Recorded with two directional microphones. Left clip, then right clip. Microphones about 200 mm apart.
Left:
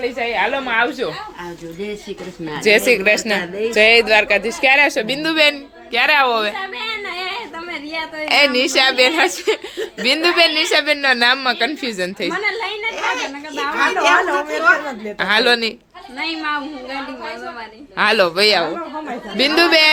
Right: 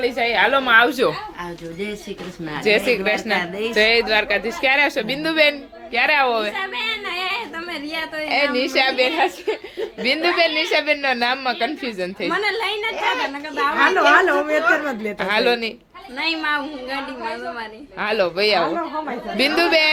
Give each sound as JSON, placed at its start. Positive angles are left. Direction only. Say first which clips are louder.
{"t": 0.0, "sound": "a woman's voice", "louder": "right 1 dB", "side_deg": -20}
{"t": 2.6, "sound": "a woman's voice", "louder": "left 5 dB", "side_deg": 20}
{"t": 6.7, "sound": "a sound", "louder": "even", "side_deg": 0}
{"t": 8.2, "sound": "a woman's voice", "louder": "left 6 dB", "side_deg": 20}
{"t": 9.7, "sound": "a woman's voice", "louder": "left 3 dB", "side_deg": 15}
{"t": 12.3, "sound": "a woman's voice", "louder": "even", "side_deg": -10}
{"t": 13.7, "sound": "a woman's voice", "louder": "even", "side_deg": -45}
{"t": 15.2, "sound": "a woman's voice", "louder": "left 4 dB", "side_deg": 15}
{"t": 16.1, "sound": "a woman's voice", "louder": "right 1 dB", "side_deg": -5}
{"t": 17.9, "sound": "a woman's voice", "louder": "left 6 dB", "side_deg": 25}